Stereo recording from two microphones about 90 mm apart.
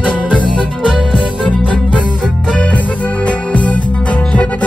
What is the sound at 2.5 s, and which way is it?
Music, 15° left (ahead or behind).